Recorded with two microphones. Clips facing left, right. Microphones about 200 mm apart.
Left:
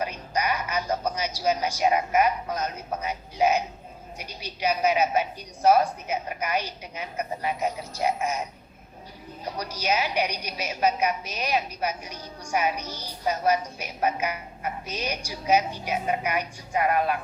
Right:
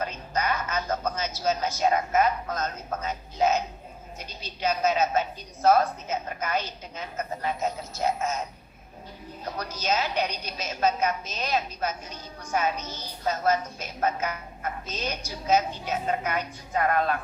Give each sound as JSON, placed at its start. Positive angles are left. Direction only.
{"t": 0.0, "sound": "a woman's voice", "side_deg": 15}